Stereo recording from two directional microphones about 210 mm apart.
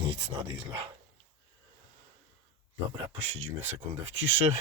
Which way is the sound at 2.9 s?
25° right (ahead or behind).